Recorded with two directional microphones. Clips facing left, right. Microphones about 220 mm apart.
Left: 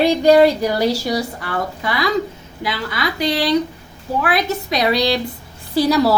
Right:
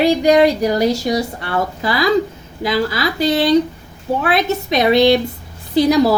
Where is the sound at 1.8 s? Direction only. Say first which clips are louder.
Right 4 dB; 30° right (ahead or behind).